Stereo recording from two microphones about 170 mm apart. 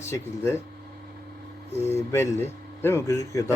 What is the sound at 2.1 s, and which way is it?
Speech, 15° left (ahead or behind).